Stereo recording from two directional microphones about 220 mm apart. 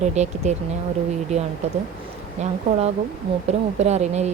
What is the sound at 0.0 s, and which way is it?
Speech, 30° right (ahead or behind).